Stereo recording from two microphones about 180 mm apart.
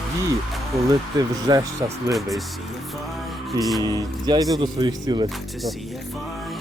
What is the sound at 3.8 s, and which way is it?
Speech, 20° right (ahead or behind).